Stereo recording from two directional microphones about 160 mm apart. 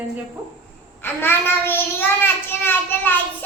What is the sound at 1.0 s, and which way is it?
A woman's voice, 15° left (ahead or behind).